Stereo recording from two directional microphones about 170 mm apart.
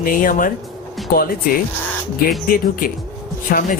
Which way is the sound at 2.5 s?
55° left (ahead or behind).